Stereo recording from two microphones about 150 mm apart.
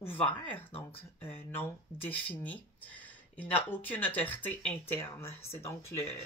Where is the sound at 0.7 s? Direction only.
40° left (ahead or behind).